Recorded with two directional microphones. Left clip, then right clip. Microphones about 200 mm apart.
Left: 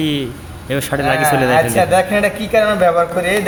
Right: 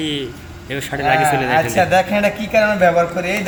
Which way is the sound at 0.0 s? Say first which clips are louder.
Left 3 dB; 40° left (ahead or behind).